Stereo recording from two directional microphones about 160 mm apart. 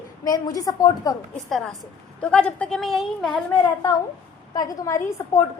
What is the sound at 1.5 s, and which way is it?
A woman's voice, centre (ahead or behind).